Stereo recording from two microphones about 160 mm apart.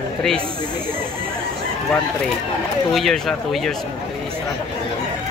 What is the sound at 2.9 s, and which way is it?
Speech, centre (ahead or behind).